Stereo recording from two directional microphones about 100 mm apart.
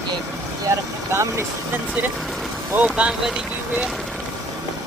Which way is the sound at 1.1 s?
30° right (ahead or behind).